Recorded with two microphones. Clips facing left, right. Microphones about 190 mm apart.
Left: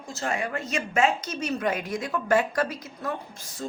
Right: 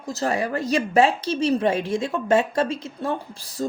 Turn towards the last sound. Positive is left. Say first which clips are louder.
# right 7 dB
turn(degrees=-35)  # may be behind; listen again after turning